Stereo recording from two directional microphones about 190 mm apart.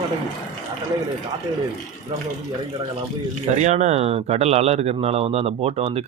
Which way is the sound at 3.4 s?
35° right (ahead or behind).